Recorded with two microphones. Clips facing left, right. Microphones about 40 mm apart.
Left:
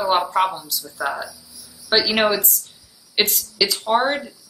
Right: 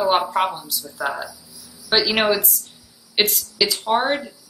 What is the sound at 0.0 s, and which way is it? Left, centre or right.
A woman's voice, centre.